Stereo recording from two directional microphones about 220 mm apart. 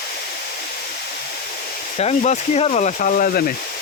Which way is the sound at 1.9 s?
30° left (ahead or behind).